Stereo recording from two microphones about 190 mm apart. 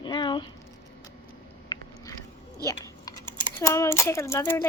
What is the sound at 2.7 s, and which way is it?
Speech, 15° left (ahead or behind).